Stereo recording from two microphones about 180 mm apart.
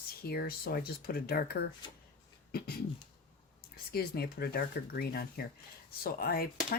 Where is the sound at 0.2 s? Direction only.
60° left (ahead or behind).